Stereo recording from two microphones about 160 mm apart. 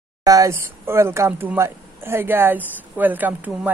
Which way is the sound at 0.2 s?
20° right (ahead or behind).